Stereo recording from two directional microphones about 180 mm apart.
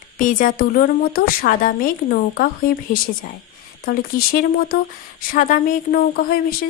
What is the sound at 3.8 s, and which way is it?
A woman's voice, 55° left (ahead or behind).